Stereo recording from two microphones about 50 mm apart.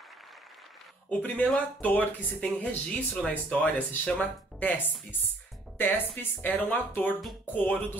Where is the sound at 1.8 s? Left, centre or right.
Left.